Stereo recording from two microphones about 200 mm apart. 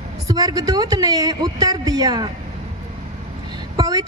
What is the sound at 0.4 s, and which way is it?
A woman's voice, 20° right (ahead or behind).